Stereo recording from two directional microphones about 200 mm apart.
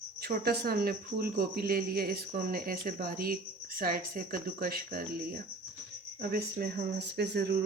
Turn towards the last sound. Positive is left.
turn(degrees=-55)  # may be behind; listen again after turning